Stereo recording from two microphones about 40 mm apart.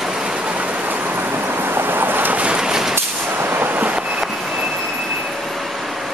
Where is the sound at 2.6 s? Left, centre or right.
Centre.